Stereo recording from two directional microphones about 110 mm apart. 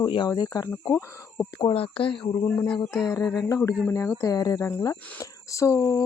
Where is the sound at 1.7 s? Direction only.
55° left (ahead or behind).